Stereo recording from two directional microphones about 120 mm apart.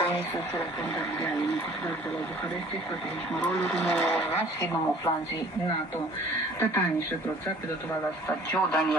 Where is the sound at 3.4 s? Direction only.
15° left (ahead or behind).